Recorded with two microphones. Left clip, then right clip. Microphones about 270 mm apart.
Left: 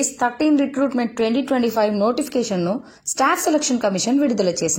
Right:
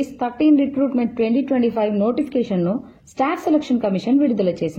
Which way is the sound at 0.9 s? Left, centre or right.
Right.